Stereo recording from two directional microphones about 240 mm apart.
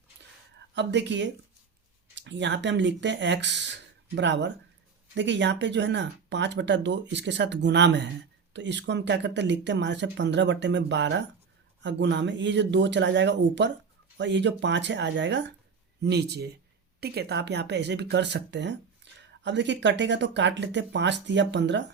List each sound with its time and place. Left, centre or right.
0.8 s speech: right
19.1 s a sound: right
19.4 s speech: right